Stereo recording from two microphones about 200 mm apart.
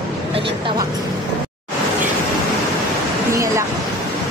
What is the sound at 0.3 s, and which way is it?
Speech, 25° right (ahead or behind).